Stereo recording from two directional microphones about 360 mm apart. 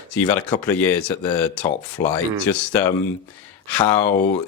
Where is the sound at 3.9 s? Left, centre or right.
Centre.